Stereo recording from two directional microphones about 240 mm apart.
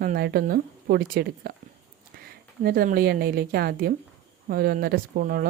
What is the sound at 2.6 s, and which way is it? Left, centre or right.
Speech, right.